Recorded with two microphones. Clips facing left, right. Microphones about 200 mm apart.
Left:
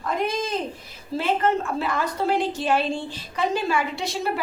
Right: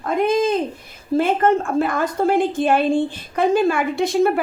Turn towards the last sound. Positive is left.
turn(degrees=-50)  # may be behind; listen again after turning